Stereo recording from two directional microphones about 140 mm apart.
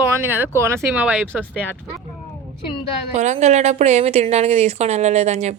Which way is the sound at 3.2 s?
55° right (ahead or behind).